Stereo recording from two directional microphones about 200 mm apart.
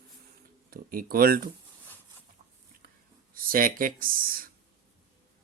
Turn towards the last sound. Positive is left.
turn(degrees=-45)  # may be behind; listen again after turning